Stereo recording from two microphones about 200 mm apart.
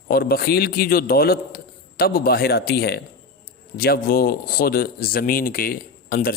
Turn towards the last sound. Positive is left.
turn(degrees=45)  # may be behind; listen again after turning